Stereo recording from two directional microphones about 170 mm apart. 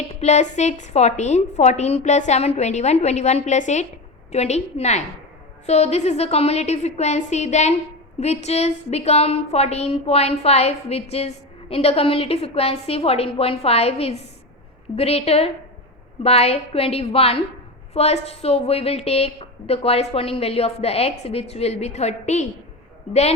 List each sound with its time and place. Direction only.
0.2 s a woman's voice: 40° left (ahead or behind)